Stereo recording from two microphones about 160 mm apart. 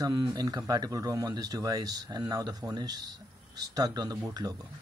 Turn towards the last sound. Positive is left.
turn(degrees=-20)  # may be behind; listen again after turning